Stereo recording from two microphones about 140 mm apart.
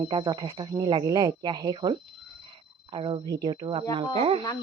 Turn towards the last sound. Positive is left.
turn(degrees=-40)  # may be behind; listen again after turning